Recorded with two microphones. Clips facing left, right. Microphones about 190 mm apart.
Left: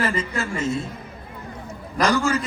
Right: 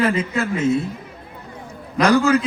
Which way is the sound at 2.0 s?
60° right (ahead or behind).